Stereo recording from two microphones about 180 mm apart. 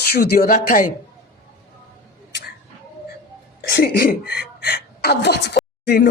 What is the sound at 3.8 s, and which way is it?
A woman's voice, 55° left (ahead or behind).